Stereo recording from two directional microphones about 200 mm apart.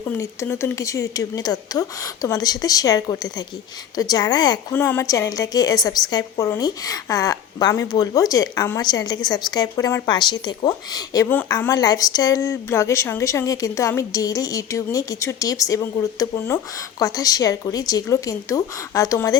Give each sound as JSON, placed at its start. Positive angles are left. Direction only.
{"t": 0.2, "sound": "a woman's voice", "side_deg": 15}